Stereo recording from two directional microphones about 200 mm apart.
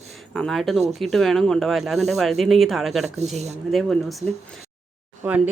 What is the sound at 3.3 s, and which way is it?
Speech, 35° right (ahead or behind).